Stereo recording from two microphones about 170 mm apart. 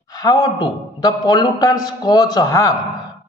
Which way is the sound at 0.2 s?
20° left (ahead or behind).